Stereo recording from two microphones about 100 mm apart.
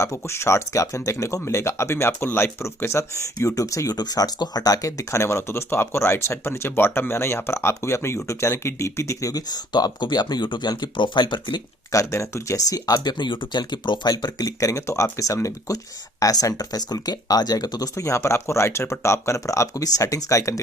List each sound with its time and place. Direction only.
0.0 s speech: 30° left (ahead or behind); by 11.6 s 50° left (ahead or behind)
11.9 s speech: 30° left (ahead or behind)